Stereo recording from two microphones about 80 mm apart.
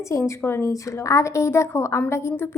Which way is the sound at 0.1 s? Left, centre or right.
Left.